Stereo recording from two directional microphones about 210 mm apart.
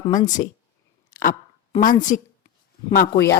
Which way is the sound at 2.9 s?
45° left (ahead or behind).